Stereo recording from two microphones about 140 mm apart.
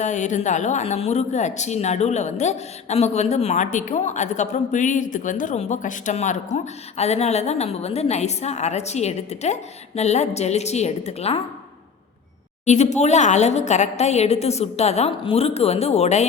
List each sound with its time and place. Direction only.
0.0 s speech: 60° left (ahead or behind)
12.6 s speech: 55° left (ahead or behind)